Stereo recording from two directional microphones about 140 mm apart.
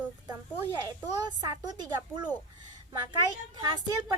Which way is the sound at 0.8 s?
30° right (ahead or behind).